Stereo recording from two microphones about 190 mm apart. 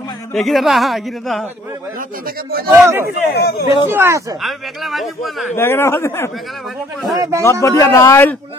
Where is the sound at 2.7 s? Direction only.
10° right (ahead or behind).